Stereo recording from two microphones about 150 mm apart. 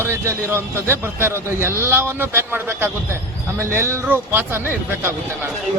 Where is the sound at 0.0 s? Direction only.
15° right (ahead or behind).